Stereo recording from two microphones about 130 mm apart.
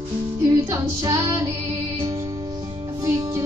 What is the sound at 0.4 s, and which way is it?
Music, 30° right (ahead or behind).